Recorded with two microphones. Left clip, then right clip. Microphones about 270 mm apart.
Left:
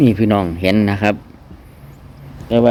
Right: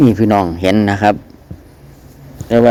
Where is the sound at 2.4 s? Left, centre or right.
Centre.